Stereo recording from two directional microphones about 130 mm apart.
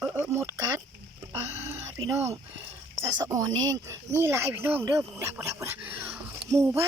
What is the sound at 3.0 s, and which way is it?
Speech, 25° right (ahead or behind).